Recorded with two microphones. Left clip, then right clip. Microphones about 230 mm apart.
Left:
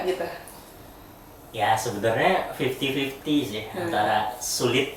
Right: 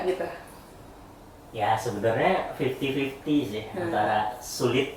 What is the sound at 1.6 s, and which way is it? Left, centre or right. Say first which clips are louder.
Speech: left 2 dB; centre.